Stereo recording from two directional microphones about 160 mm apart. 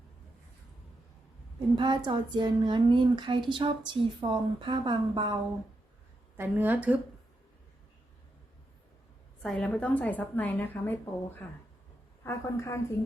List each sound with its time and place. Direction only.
1.5 s speech: 30° right (ahead or behind)
6.3 s a woman's voice: 15° right (ahead or behind)
9.4 s a woman's voice: 5° left (ahead or behind)
12.2 s a woman's voice: 15° left (ahead or behind)